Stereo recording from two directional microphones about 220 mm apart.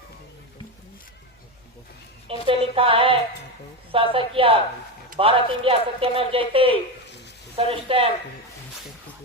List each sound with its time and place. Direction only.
2.2 s speech: 25° right (ahead or behind)